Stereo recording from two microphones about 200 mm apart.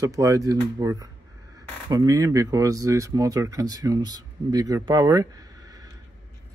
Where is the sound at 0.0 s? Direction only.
15° right (ahead or behind).